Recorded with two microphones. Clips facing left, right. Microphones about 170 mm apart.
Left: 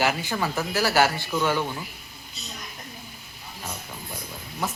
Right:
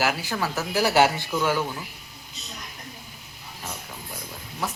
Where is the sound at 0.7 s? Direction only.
20° right (ahead or behind).